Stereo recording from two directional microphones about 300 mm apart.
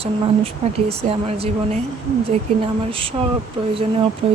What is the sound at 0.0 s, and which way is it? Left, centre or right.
Speech, centre.